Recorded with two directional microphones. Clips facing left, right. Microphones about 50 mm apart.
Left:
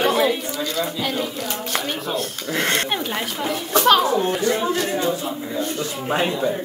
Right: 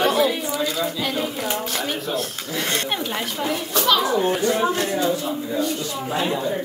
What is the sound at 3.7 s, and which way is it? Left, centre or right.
Speech, left.